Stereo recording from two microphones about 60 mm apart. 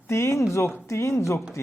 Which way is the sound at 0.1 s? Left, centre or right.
Left.